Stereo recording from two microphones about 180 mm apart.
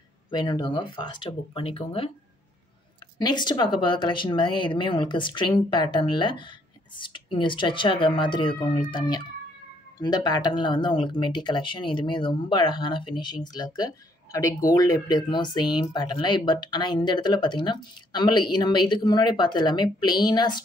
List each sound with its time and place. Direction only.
0.3 s speech: 25° left (ahead or behind)
3.2 s speech: 25° left (ahead or behind)